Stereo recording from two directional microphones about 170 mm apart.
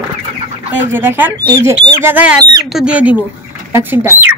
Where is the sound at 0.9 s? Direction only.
10° right (ahead or behind).